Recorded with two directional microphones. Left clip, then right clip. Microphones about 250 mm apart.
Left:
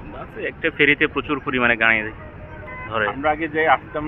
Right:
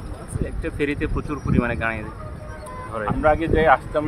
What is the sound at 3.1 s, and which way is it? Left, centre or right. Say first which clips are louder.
Speech: right 2 dB; right.